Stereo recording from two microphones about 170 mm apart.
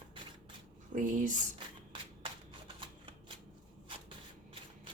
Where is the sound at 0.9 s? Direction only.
50° right (ahead or behind).